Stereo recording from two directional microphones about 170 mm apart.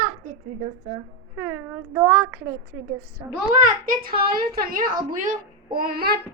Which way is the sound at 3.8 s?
60° right (ahead or behind).